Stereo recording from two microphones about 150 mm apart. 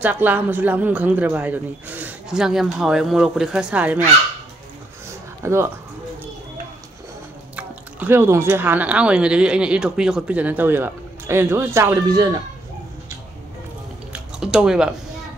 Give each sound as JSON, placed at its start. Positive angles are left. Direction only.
{"t": 0.0, "sound": "speech", "side_deg": -10}
{"t": 5.4, "sound": "speech", "side_deg": -15}
{"t": 7.5, "sound": "speech", "side_deg": -15}
{"t": 14.1, "sound": "a sound", "side_deg": -5}